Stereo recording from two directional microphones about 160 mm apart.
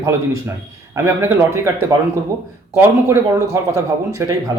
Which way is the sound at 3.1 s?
20° right (ahead or behind).